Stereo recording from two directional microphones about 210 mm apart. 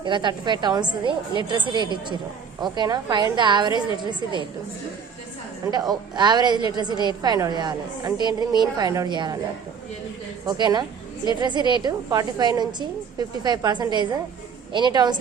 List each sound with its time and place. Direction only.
0.0 s a woman's voice: 20° right (ahead or behind)
5.7 s a woman's voice: 20° right (ahead or behind)
10.4 s a woman's voice: 20° right (ahead or behind)